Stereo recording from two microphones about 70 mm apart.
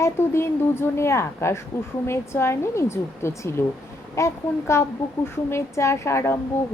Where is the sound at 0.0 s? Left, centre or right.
Left.